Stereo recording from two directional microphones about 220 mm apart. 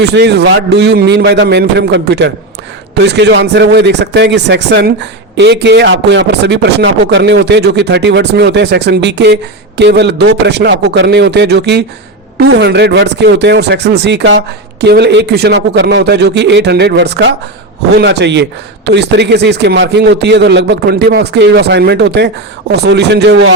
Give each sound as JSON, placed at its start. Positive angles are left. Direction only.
{"t": 0.1, "sound": "a man's voice", "side_deg": -50}